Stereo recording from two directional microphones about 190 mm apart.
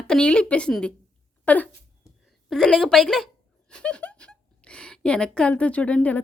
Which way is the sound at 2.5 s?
Centre (ahead or behind).